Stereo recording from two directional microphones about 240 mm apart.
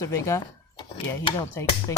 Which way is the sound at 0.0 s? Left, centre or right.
Centre.